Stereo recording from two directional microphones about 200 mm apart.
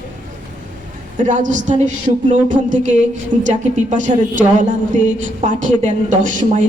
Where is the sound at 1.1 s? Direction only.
40° right (ahead or behind).